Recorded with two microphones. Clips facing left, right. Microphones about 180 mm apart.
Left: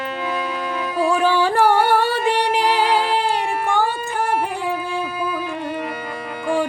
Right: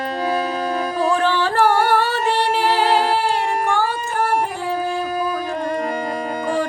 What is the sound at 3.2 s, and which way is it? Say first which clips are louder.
Carnatic music: right 1 dB; 15° left (ahead or behind).